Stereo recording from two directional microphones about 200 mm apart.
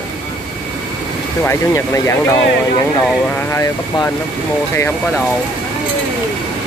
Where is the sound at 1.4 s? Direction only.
15° left (ahead or behind).